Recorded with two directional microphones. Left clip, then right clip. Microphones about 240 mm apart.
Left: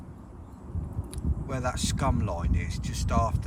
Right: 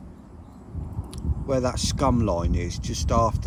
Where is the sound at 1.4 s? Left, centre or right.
Centre.